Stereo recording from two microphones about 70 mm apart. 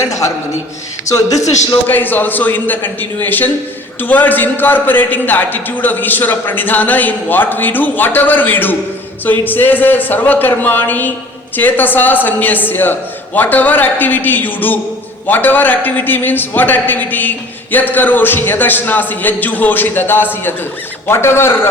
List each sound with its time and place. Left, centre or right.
0.0 s a man's voice: left
1.9 s a man's voice: left